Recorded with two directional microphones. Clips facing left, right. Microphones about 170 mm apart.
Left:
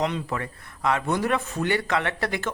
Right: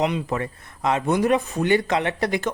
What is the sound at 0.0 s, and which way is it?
Speech, 20° right (ahead or behind).